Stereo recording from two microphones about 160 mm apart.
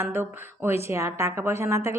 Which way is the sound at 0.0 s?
15° right (ahead or behind).